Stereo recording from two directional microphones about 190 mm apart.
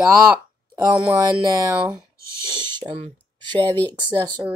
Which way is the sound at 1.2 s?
15° right (ahead or behind).